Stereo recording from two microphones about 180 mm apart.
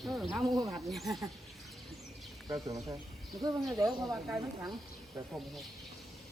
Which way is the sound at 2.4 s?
20° right (ahead or behind).